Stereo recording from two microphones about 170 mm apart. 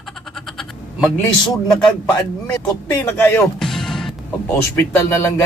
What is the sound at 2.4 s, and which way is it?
Speech, 15° left (ahead or behind).